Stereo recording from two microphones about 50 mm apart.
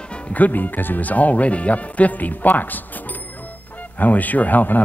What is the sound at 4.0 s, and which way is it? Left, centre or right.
Speech, left.